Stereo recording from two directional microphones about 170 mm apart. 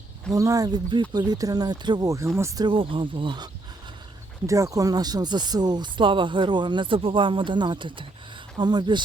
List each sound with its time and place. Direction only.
0.3 s speech: 20° right (ahead or behind)